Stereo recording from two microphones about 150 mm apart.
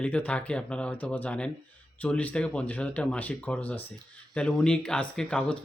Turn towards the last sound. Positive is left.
turn(degrees=5)  # may be behind; listen again after turning